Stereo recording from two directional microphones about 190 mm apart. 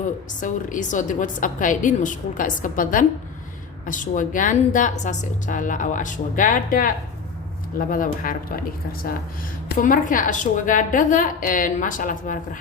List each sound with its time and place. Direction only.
0.0 s a woman's voice: 45° left (ahead or behind)